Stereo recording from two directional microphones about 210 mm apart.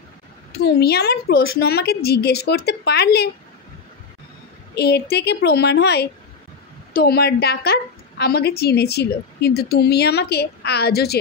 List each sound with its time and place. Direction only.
0.6 s a woman's voice: 50° left (ahead or behind)
4.7 s a woman's voice: 50° left (ahead or behind)